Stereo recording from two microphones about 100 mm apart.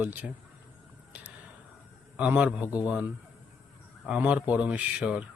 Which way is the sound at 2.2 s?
10° right (ahead or behind).